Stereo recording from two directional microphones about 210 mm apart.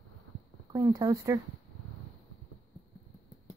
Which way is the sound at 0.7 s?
15° right (ahead or behind).